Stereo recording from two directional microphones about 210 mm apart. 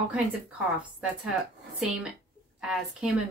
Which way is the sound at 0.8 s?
5° right (ahead or behind).